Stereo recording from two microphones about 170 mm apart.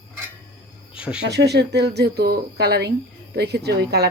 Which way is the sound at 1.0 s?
5° right (ahead or behind).